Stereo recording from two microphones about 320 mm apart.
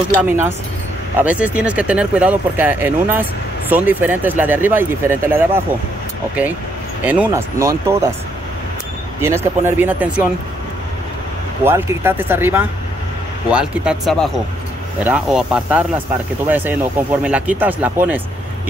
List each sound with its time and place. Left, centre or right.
0.2 s speech: centre
7.1 s speech: centre
9.2 s speech: centre
11.6 s speech: centre